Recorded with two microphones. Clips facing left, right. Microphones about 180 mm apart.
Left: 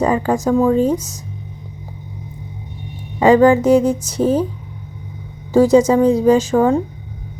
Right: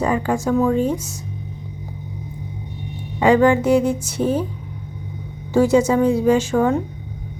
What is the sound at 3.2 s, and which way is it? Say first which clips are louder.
Music: left 4 dB; 40° left (ahead or behind).